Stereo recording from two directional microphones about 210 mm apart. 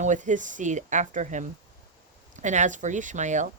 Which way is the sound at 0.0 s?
35° right (ahead or behind).